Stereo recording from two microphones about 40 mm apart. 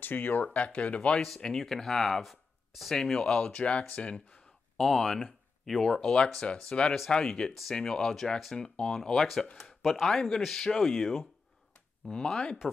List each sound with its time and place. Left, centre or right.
0.0 s speech: left
0.5 s speech: left
1.7 s speech: centre; by 4.2 s left
4.7 s speech: centre
12.1 s speech: left